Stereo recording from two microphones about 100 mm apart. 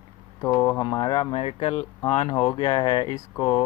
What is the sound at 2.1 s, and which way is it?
Speech, 75° left (ahead or behind).